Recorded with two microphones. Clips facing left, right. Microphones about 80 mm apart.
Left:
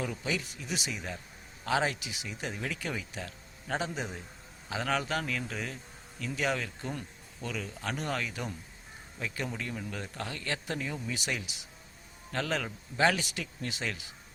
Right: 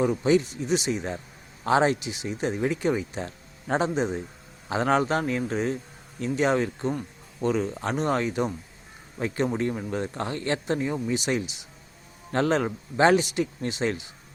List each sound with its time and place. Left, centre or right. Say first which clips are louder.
0.2 s speech: right 13 dB; right
9.1 s speech: right 10 dB; right